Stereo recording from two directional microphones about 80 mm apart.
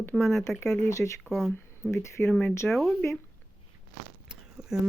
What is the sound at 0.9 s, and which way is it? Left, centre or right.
Speech, left.